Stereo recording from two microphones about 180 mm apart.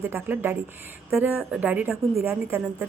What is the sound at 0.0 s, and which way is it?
A woman's voice, 10° right (ahead or behind).